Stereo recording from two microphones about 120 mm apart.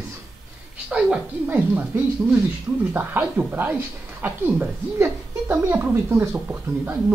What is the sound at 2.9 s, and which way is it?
Speech, 15° right (ahead or behind).